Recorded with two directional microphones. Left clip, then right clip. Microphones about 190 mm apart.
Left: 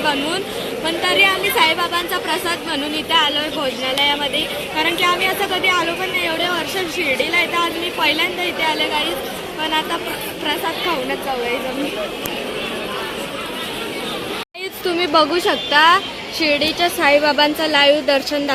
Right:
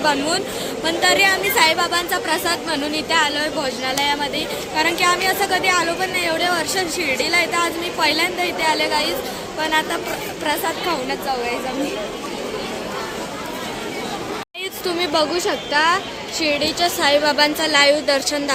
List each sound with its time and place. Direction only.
0.9 s a woman's voice: 15° right (ahead or behind)
14.8 s a woman's voice: 25° left (ahead or behind)